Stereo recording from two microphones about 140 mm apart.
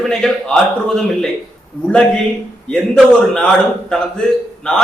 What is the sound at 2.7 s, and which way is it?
A man's voice, 5° left (ahead or behind).